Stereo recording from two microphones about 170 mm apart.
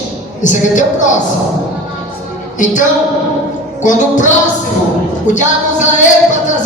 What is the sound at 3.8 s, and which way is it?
Speech, 45° left (ahead or behind).